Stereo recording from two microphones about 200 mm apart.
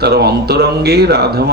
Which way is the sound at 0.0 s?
55° right (ahead or behind).